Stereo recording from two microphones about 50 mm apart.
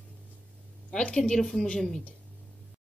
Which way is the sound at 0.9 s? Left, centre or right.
Centre.